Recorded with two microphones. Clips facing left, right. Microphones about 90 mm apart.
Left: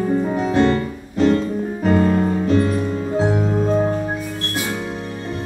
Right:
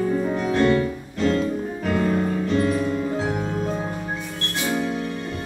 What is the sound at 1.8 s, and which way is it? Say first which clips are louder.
Music: left 6 dB; 45° left (ahead or behind).